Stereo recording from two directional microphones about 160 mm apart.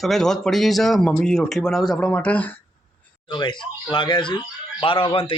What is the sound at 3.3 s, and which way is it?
Speech, 30° left (ahead or behind).